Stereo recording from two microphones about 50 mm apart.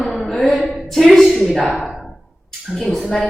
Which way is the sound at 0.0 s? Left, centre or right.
Centre.